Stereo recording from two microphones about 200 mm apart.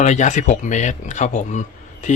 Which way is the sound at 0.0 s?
35° left (ahead or behind).